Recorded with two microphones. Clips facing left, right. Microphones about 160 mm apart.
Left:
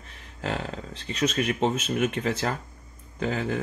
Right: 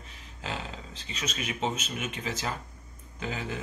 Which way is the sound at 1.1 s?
55° left (ahead or behind).